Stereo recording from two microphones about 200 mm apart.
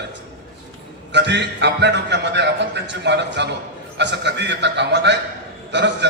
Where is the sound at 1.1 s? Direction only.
60° right (ahead or behind).